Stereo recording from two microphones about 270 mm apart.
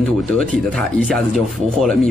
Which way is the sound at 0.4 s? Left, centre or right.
Centre.